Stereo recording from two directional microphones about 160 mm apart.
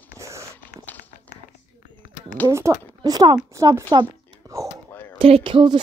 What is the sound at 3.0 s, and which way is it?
Speech, 25° right (ahead or behind).